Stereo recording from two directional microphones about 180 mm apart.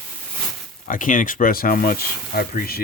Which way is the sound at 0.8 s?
45° left (ahead or behind).